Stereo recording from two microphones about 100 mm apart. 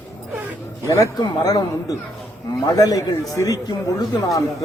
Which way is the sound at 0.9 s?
35° left (ahead or behind).